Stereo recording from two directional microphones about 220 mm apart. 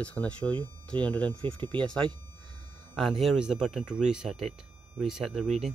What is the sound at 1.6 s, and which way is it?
Speech, 20° right (ahead or behind).